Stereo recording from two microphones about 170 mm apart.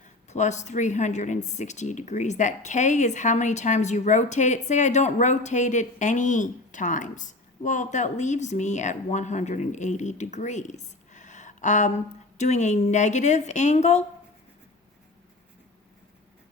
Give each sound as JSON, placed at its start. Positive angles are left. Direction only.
{"t": 0.0, "sound": "a woman's voice", "side_deg": 45}